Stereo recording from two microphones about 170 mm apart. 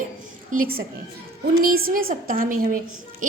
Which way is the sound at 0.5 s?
60° right (ahead or behind).